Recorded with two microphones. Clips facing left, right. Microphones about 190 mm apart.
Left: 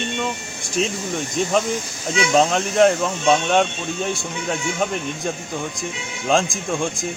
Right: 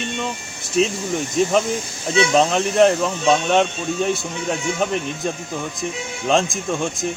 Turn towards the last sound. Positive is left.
turn(degrees=0)  # may be behind; listen again after turning